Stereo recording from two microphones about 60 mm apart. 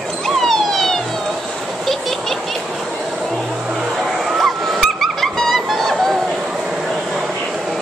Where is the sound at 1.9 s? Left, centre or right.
Centre.